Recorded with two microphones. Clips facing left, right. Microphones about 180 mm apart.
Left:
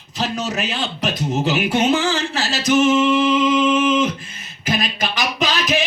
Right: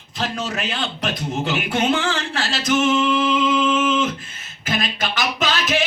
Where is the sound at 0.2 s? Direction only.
5° left (ahead or behind).